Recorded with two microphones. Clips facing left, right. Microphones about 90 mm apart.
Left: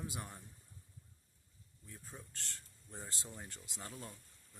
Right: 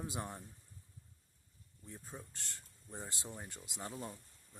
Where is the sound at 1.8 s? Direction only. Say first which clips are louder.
Right 4 dB; 25° right (ahead or behind).